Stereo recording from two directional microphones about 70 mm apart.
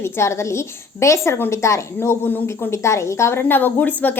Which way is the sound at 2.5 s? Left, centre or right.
Left.